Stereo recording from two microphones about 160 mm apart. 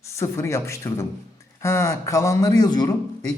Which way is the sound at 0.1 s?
20° left (ahead or behind).